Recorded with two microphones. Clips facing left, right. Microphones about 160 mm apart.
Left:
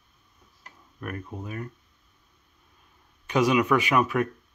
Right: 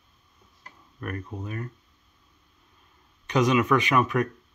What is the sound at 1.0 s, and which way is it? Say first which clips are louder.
Speech: right 1 dB; 5° left (ahead or behind).